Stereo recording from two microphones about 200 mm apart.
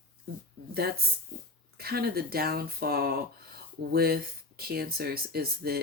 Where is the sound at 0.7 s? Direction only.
50° right (ahead or behind).